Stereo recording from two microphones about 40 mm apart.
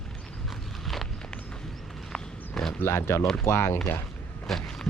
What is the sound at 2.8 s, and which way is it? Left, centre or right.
Speech, left.